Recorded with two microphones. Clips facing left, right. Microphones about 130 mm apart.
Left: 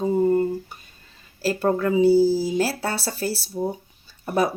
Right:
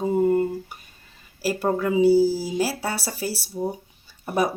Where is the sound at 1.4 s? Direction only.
10° right (ahead or behind).